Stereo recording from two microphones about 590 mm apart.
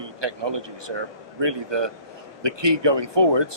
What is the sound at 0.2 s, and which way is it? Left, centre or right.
A man's voice, right.